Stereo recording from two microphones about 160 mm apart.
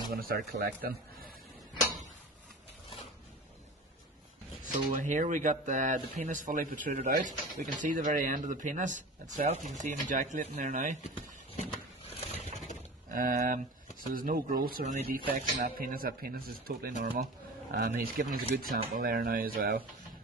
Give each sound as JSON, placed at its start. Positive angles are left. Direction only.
{"t": 0.1, "sound": "speech", "side_deg": -75}
{"t": 4.9, "sound": "a man's voice", "side_deg": -50}
{"t": 11.7, "sound": "a sound", "side_deg": 40}
{"t": 13.1, "sound": "speech", "side_deg": -60}